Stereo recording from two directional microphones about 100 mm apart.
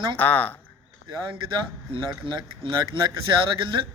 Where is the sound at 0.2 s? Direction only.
15° left (ahead or behind).